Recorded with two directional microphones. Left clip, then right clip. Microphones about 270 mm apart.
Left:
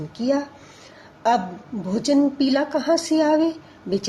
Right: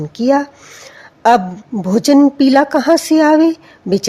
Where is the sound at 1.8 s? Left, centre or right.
Right.